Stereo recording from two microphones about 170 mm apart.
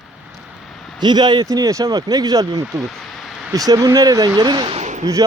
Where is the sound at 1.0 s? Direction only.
25° right (ahead or behind).